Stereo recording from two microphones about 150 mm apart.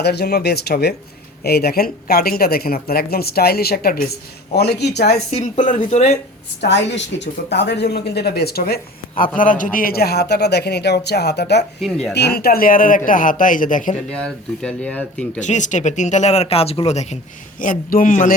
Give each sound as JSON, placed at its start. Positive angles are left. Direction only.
{"t": 0.0, "sound": "speech", "side_deg": 90}
{"t": 5.3, "sound": "speech", "side_deg": 55}
{"t": 7.5, "sound": "speech", "side_deg": 90}
{"t": 9.4, "sound": "speech", "side_deg": 65}
{"t": 9.7, "sound": "speech", "side_deg": 80}
{"t": 11.8, "sound": "speech", "side_deg": 0}
{"t": 12.1, "sound": "speech", "side_deg": 90}
{"t": 14.1, "sound": "speech", "side_deg": 5}
{"t": 15.4, "sound": "speech", "side_deg": 55}
{"t": 17.6, "sound": "speech", "side_deg": 60}